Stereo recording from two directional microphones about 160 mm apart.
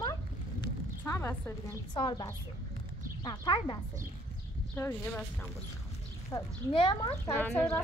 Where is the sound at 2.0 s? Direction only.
30° left (ahead or behind).